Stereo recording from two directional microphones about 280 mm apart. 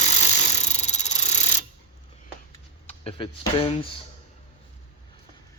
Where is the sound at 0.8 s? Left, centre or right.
Left.